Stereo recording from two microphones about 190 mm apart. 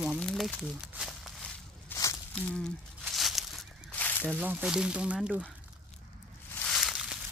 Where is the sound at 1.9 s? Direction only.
15° left (ahead or behind).